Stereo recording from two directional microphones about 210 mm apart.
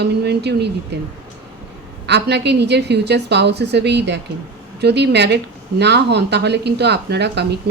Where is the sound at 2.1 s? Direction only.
55° right (ahead or behind).